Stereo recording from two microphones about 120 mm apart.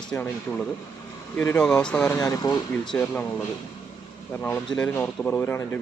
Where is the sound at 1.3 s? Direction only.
15° left (ahead or behind).